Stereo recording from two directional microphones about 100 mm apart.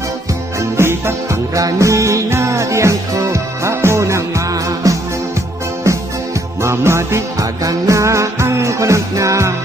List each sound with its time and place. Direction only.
0.6 s music: 25° right (ahead or behind)